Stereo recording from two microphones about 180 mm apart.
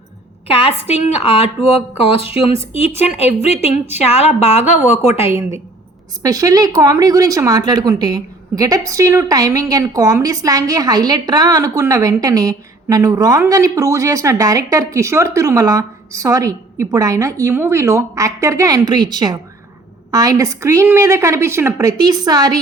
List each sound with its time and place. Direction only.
0.5 s a woman's voice: 30° left (ahead or behind)
6.2 s a woman's voice: 20° right (ahead or behind)